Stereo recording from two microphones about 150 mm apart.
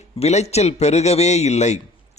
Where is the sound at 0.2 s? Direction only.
45° left (ahead or behind).